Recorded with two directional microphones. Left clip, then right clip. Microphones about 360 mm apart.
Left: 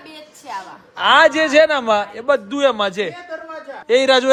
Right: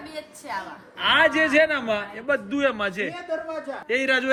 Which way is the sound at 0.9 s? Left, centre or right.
Centre.